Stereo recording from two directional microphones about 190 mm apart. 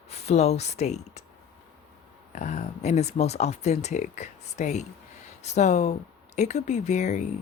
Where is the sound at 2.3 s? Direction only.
40° left (ahead or behind).